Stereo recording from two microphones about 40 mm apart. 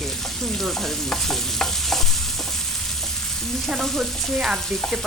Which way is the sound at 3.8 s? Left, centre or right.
Centre.